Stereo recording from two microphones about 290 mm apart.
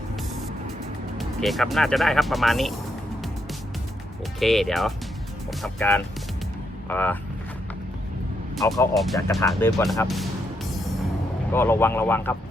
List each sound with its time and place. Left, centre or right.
0.2 s vehicle: centre
1.2 s speech: centre
4.4 s speech: centre
8.5 s speech: centre
9.5 s music: centre
11.5 s speech: centre